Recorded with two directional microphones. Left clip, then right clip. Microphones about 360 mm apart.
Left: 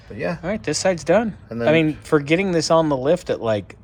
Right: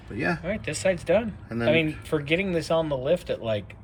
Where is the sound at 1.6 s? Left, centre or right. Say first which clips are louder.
Left 6 dB; left.